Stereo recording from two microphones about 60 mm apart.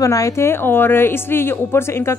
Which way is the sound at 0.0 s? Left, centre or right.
Left.